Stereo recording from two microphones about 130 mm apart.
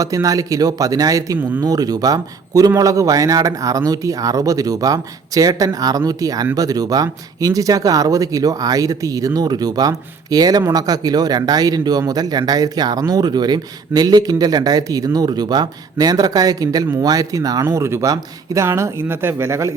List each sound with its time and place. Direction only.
0.0 s a man's voice: 25° right (ahead or behind)
1.4 s speech: 15° right (ahead or behind)
1.6 s a man's voice: 30° right (ahead or behind)